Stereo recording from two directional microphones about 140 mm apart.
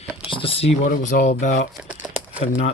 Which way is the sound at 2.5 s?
55° left (ahead or behind).